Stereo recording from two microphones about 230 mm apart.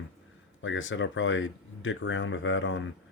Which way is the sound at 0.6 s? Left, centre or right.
Left.